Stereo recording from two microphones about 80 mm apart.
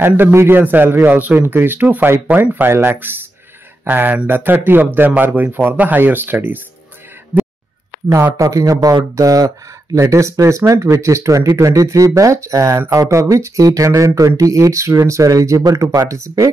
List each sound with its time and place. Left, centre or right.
0.0 s speech: right
8.4 s speech: right